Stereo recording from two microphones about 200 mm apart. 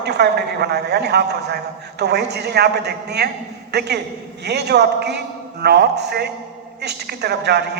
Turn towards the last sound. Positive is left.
turn(degrees=-55)  # may be behind; listen again after turning